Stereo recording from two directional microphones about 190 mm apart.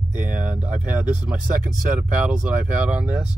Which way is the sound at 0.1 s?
45° right (ahead or behind).